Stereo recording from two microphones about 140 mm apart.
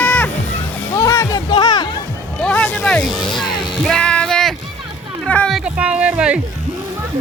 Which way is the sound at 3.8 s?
5° left (ahead or behind).